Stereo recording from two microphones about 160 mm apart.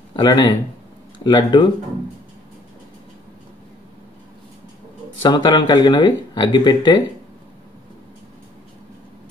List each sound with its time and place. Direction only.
0.1 s speech: 30° left (ahead or behind)
5.2 s speech: 30° left (ahead or behind)